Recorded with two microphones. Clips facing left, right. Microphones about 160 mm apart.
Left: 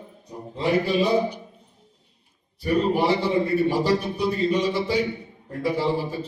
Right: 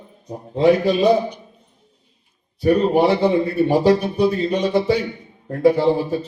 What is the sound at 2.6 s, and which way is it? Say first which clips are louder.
A man's voice: right 6 dB; 60° right (ahead or behind).